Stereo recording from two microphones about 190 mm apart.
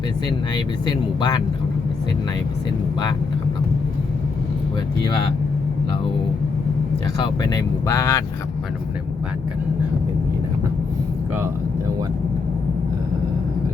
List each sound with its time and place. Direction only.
0.5 s speech: 20° left (ahead or behind)
7.5 s speech: 15° left (ahead or behind)